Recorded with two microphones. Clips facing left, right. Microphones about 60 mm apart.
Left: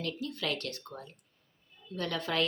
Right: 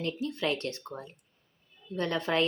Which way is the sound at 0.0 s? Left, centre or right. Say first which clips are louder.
Right 4 dB; right.